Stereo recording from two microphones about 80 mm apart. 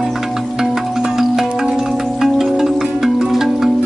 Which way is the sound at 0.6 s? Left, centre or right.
Centre.